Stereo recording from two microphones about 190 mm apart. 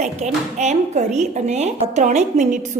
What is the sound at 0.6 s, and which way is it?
A woman's voice, 35° right (ahead or behind).